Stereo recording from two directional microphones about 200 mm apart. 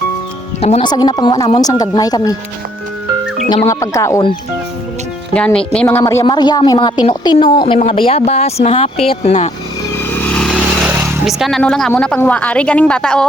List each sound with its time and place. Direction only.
0.6 s speech: 25° left (ahead or behind)
3.7 s speech: 15° left (ahead or behind)
5.3 s speech: 5° left (ahead or behind); by 9.5 s 35° left (ahead or behind)
10.0 s vehicle: 10° left (ahead or behind)
10.8 s a sound: 10° right (ahead or behind)
11.3 s a woman's voice: centre (ahead or behind)